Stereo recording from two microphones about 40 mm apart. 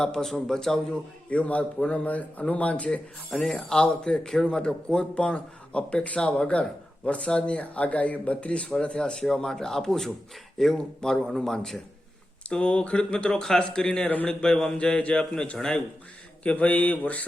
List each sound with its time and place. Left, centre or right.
0.0 s speech: centre
1.3 s speech: left
3.3 s speech: centre
4.4 s speech: left
9.2 s speech: centre
12.5 s speech: left
14.8 s speech: left
15.5 s speech: centre
16.4 s speech: left